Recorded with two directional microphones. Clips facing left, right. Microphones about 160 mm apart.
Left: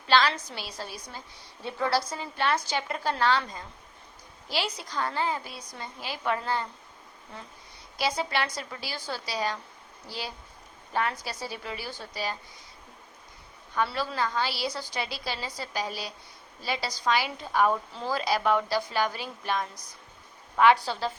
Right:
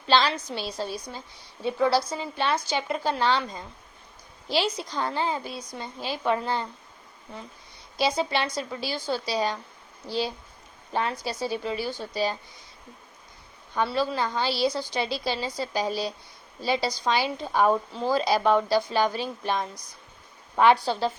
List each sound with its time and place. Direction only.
0.1 s a woman's voice: 25° right (ahead or behind)
7.9 s a woman's voice: 25° right (ahead or behind)
13.7 s a woman's voice: 25° right (ahead or behind)